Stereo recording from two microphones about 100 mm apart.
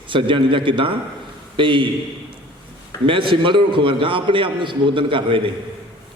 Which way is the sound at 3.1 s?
60° right (ahead or behind).